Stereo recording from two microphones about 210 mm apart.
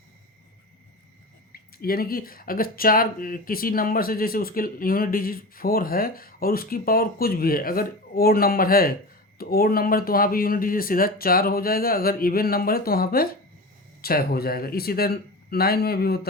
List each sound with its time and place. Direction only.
1.5 s speech: 45° left (ahead or behind)